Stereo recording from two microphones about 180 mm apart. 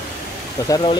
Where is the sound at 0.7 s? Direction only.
25° left (ahead or behind).